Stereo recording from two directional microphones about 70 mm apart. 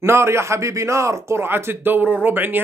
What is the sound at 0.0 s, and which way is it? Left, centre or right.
Speech, right.